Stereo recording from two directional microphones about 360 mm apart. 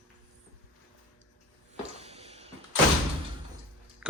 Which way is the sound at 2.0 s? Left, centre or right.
Centre.